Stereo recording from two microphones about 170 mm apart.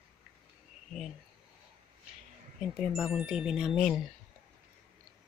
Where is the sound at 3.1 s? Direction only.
5° right (ahead or behind).